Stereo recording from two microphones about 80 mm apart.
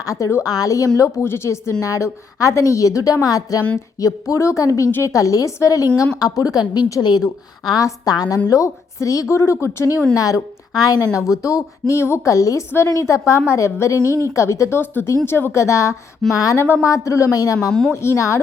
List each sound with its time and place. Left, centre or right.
0.0 s a woman's voice: left
7.8 s a woman's voice: left
8.4 s a woman's voice: left
14.0 s a woman's voice: right
14.3 s a woman's voice: left
17.7 s a woman's voice: centre
17.9 s a woman's voice: left